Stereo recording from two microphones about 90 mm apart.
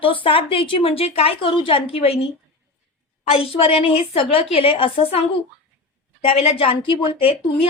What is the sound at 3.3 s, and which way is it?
A woman's voice, 90° left.